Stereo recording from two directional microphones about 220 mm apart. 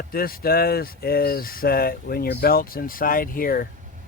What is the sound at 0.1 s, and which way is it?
Speech, 40° left (ahead or behind).